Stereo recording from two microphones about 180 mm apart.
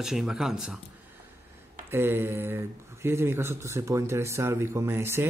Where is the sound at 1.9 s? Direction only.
10° right (ahead or behind).